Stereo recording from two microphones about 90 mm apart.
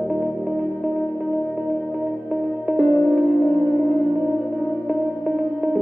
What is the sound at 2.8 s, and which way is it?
Music, 20° left (ahead or behind).